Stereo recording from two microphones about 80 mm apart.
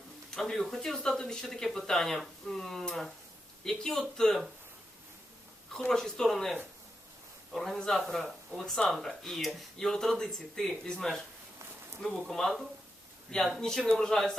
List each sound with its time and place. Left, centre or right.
0.3 s speech: centre
5.9 s speech: centre